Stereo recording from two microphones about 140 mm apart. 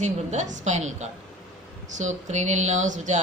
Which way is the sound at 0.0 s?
55° right (ahead or behind).